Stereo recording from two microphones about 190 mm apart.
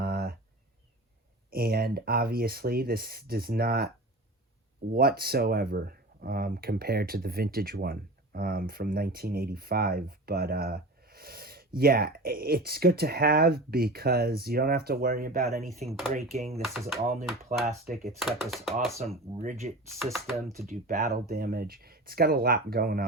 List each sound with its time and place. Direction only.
0.0 s a sound: 50° right (ahead or behind)
1.5 s speech: 50° right (ahead or behind)
4.9 s speech: 55° right (ahead or behind)
15.8 s speech: centre (ahead or behind)
16.1 s speech: 35° right (ahead or behind)
16.6 s speech: centre (ahead or behind)
17.9 s speech: centre (ahead or behind)
19.4 s speech: 35° right (ahead or behind)
20.0 s speech: centre (ahead or behind)
20.7 s speech: 50° right (ahead or behind)